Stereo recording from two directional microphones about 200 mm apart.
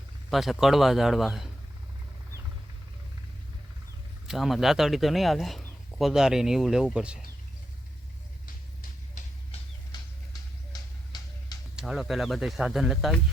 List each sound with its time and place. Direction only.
0.3 s speech: centre (ahead or behind)
4.3 s speech: centre (ahead or behind)
8.8 s a sound: 40° left (ahead or behind)
11.8 s speech: centre (ahead or behind)